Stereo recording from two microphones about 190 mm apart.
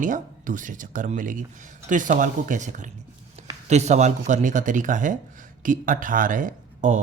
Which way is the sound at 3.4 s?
35° right (ahead or behind).